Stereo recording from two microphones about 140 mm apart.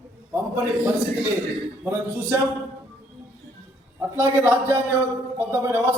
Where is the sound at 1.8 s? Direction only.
15° right (ahead or behind).